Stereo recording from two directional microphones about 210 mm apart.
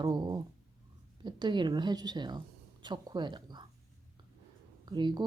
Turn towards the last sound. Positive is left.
turn(degrees=-20)  # may be behind; listen again after turning